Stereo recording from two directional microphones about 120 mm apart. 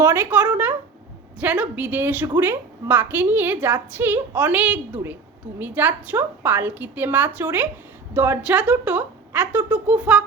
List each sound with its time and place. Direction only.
0.0 s a woman's voice: 15° right (ahead or behind)